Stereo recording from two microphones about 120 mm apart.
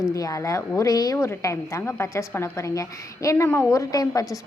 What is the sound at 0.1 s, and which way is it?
A woman's voice, 30° left (ahead or behind).